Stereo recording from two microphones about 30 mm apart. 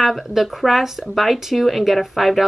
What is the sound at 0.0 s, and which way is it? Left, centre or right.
Speech, centre.